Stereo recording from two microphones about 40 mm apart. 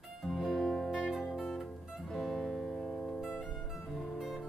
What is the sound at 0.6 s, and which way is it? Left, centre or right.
Music, centre.